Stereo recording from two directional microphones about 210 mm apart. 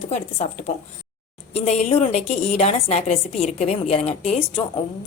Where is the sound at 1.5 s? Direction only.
30° left (ahead or behind).